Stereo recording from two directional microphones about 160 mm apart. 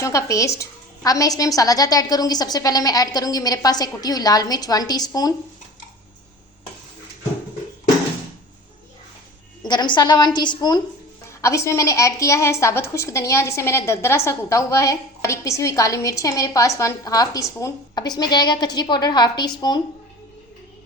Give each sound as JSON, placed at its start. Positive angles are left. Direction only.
{"t": 0.0, "sound": "a woman's voice", "side_deg": 20}
{"t": 9.6, "sound": "a woman's voice", "side_deg": 30}